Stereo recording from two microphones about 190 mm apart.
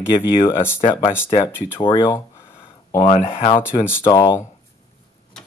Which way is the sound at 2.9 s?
35° left (ahead or behind).